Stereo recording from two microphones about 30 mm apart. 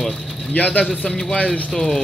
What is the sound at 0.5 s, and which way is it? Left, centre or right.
Speech, left.